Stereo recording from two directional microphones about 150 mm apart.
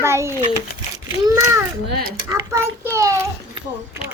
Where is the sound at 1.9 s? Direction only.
90° right.